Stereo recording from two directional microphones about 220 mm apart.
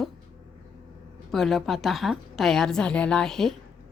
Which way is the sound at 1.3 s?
Centre (ahead or behind).